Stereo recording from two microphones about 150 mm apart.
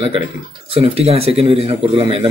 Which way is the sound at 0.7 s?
40° right (ahead or behind).